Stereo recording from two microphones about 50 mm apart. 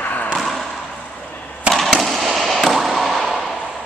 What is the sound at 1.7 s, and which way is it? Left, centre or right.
Fireworks, centre.